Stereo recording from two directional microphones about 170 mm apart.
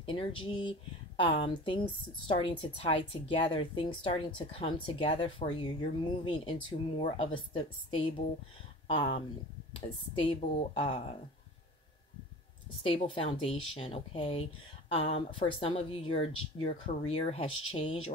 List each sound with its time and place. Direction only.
0.0 s speech: 30° left (ahead or behind)
12.8 s speech: 35° left (ahead or behind)